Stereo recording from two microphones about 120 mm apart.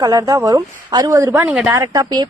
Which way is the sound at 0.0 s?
30° right (ahead or behind).